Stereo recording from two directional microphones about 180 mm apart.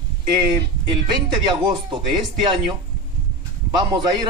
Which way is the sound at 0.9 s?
25° right (ahead or behind).